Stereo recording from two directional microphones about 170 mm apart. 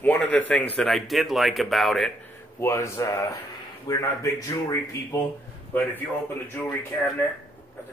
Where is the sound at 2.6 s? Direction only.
20° left (ahead or behind).